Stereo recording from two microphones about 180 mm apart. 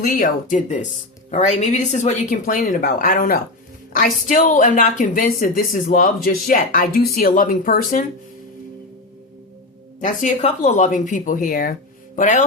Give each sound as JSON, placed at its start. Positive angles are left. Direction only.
{"t": 0.0, "sound": "a woman's voice", "side_deg": 45}
{"t": 10.0, "sound": "a woman's voice", "side_deg": 45}